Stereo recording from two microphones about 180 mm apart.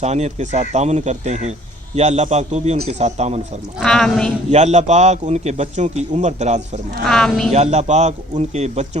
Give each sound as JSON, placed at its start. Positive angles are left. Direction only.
{"t": 0.0, "sound": "a man's voice", "side_deg": -40}
{"t": 3.8, "sound": "a woman's voice", "side_deg": 5}
{"t": 4.5, "sound": "a man's voice", "side_deg": -40}
{"t": 7.1, "sound": "a woman's voice", "side_deg": 5}
{"t": 7.5, "sound": "a man's voice", "side_deg": -40}